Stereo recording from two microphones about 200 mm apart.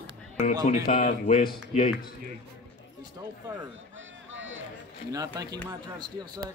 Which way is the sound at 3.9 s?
70° right (ahead or behind).